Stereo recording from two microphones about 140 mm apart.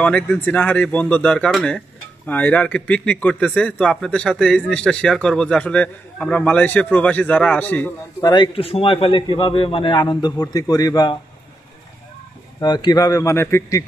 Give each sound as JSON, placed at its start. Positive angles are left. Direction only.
{"t": 0.0, "sound": "speech", "side_deg": 10}
{"t": 8.2, "sound": "a man's voice", "side_deg": 30}
{"t": 8.5, "sound": "a man's voice", "side_deg": 45}
{"t": 12.5, "sound": "speech", "side_deg": 30}